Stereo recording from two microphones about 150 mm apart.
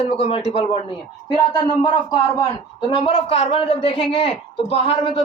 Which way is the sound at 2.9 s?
40° left (ahead or behind).